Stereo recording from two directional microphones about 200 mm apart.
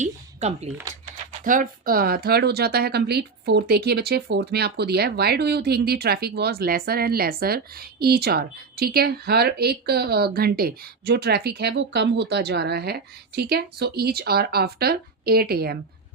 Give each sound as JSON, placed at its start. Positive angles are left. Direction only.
{"t": 0.0, "sound": "speech", "side_deg": -35}